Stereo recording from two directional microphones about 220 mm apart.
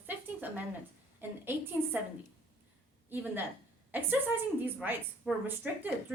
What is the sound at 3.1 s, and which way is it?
Speech, 10° right (ahead or behind).